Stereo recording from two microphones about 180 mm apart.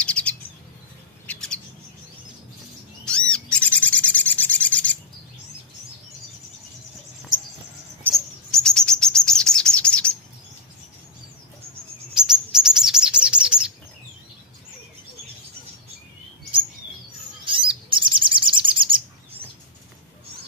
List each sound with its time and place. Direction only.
0.0 s bird: 5° left (ahead or behind)
3.1 s bird: 5° left (ahead or behind)
8.1 s chirp: 5° left (ahead or behind)
12.2 s chirp: 5° right (ahead or behind)
17.5 s bird: 30° right (ahead or behind)